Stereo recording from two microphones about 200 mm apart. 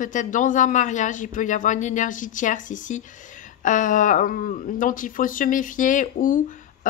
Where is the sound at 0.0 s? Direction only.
40° left (ahead or behind).